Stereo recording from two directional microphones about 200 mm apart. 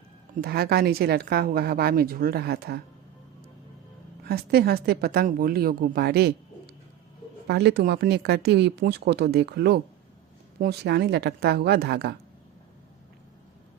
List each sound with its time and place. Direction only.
0.4 s a woman's voice: 50° right (ahead or behind)
4.2 s a woman's voice: 55° right (ahead or behind)
7.4 s speech: 55° right (ahead or behind)